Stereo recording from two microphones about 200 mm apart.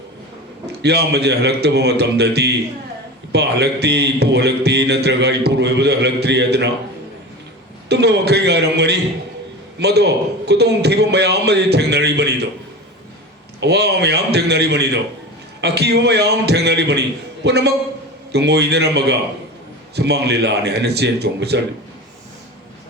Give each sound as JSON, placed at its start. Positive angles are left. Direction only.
{"t": 0.8, "sound": "speech", "side_deg": -55}
{"t": 7.9, "sound": "speech", "side_deg": -55}
{"t": 13.6, "sound": "a man's voice", "side_deg": -55}